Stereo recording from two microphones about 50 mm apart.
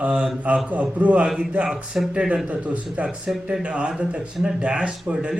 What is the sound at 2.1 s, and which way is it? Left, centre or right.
A man's voice, right.